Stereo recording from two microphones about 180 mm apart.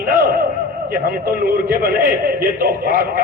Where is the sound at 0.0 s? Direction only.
55° right (ahead or behind).